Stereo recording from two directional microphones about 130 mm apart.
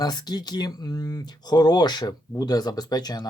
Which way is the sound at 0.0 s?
30° left (ahead or behind).